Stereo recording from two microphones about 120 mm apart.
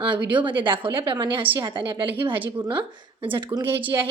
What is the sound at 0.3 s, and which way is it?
A woman's voice, 45° right (ahead or behind).